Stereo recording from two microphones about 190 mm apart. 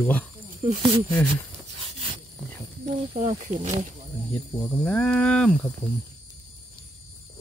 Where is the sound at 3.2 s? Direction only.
40° right (ahead or behind).